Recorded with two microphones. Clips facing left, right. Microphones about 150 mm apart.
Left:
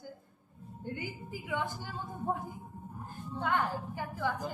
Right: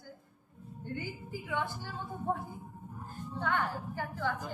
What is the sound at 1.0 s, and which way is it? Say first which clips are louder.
Speech: right 1 dB; 15° left (ahead or behind).